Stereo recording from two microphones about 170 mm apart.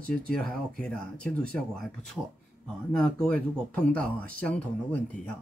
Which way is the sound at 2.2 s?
5° right (ahead or behind).